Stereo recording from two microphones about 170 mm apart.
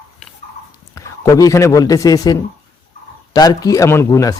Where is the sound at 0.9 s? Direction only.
20° left (ahead or behind).